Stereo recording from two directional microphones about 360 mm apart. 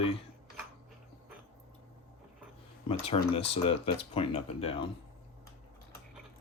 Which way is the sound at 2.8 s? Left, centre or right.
Centre.